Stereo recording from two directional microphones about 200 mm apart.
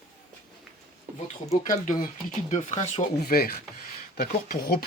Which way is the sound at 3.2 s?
50° left (ahead or behind).